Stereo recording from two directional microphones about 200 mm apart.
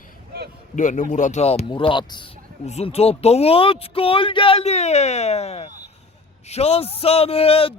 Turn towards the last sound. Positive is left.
turn(degrees=30)  # may be behind; listen again after turning